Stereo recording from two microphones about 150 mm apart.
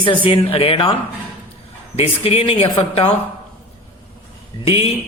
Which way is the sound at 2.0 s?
40° left (ahead or behind).